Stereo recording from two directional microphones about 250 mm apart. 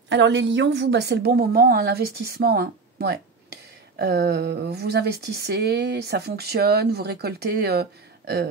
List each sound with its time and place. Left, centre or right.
0.1 s speech: right